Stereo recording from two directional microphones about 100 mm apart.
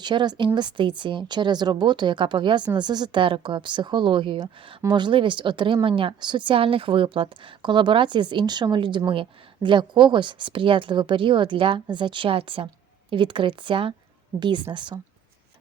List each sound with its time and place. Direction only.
0.0 s a woman's voice: 50° right (ahead or behind)
14.3 s a woman's voice: 50° right (ahead or behind)